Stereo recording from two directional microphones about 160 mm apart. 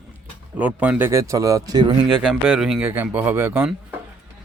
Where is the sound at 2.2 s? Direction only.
5° right (ahead or behind).